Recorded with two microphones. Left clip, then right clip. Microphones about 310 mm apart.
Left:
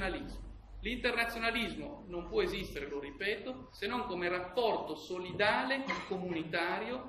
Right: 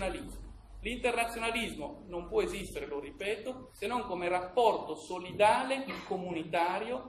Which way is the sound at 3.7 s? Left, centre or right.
Centre.